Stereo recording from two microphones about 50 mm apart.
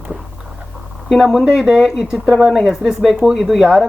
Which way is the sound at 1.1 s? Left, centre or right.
Centre.